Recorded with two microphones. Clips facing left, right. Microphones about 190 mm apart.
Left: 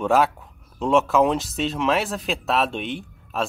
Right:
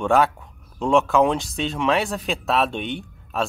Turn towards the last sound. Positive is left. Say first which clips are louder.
# right 1 dB
turn(degrees=0)  # may be behind; listen again after turning